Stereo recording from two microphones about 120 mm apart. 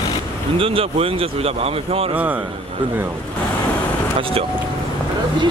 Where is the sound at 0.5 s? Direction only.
50° right (ahead or behind).